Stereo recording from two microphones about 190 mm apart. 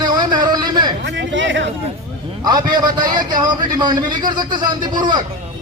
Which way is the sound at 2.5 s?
20° right (ahead or behind).